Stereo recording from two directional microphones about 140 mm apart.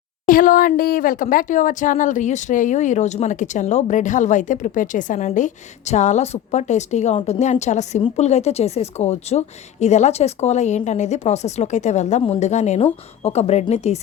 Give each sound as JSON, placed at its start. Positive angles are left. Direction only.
{"t": 0.3, "sound": "speech", "side_deg": 80}